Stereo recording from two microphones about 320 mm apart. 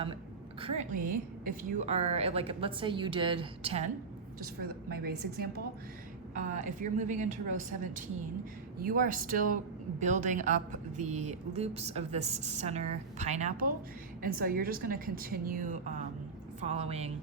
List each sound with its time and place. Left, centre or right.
0.8 s a woman's voice: right
4.9 s a woman's voice: right